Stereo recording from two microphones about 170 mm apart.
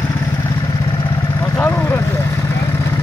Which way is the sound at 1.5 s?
15° left (ahead or behind).